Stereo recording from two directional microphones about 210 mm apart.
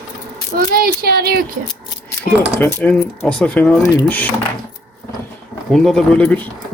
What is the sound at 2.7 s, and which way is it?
Speech, 5° left (ahead or behind).